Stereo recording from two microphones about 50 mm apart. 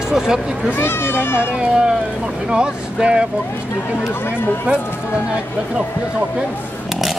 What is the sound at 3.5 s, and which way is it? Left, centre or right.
Speech, left.